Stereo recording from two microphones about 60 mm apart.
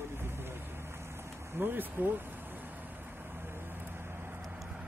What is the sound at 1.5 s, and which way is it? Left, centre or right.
Speech, right.